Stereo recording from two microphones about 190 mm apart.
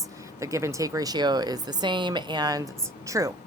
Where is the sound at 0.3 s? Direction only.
15° right (ahead or behind).